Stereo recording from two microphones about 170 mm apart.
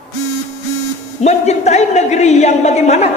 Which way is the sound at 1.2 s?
40° left (ahead or behind).